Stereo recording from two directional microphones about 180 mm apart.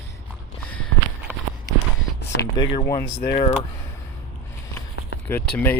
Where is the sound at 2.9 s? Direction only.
20° left (ahead or behind).